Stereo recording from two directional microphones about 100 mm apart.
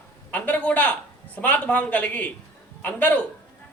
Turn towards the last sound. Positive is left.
turn(degrees=15)  # may be behind; listen again after turning